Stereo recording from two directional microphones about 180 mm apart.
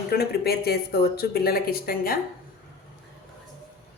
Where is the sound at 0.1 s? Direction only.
60° left (ahead or behind).